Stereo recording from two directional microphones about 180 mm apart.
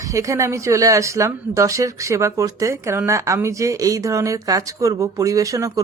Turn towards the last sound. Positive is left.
turn(degrees=-20)  # may be behind; listen again after turning